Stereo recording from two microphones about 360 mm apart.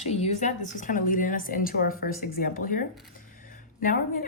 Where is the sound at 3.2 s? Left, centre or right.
Left.